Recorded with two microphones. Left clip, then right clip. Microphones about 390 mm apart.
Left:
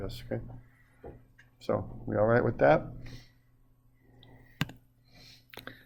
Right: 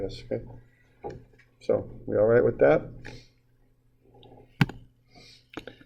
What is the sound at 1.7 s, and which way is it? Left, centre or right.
Speech, left.